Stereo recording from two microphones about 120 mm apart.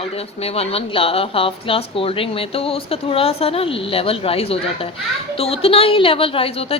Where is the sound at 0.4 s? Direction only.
55° left (ahead or behind).